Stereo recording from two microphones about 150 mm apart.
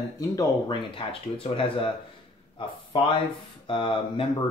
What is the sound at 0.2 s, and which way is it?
Speech, 20° left (ahead or behind).